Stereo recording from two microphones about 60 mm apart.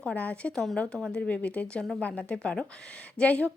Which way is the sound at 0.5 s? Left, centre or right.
Centre.